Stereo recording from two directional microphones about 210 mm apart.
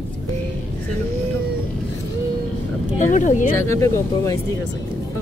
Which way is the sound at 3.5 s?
15° left (ahead or behind).